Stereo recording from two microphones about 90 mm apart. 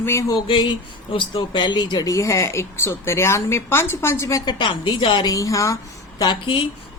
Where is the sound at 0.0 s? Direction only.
30° left (ahead or behind).